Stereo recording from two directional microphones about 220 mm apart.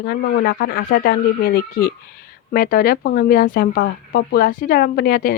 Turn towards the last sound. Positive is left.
turn(degrees=40)  # may be behind; listen again after turning